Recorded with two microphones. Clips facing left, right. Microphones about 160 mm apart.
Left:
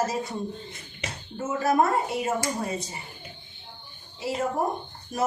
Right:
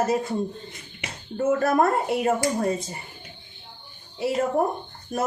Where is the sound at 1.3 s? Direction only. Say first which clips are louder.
Right 3 dB; 55° right (ahead or behind).